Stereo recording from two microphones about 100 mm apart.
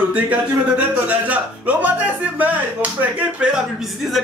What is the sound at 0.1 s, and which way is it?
Speech, 15° right (ahead or behind).